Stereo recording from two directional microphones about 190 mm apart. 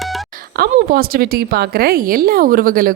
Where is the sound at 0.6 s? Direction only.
55° right (ahead or behind).